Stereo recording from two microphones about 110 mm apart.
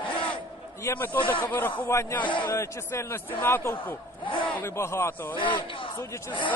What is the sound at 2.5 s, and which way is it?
A man's voice, 25° left (ahead or behind).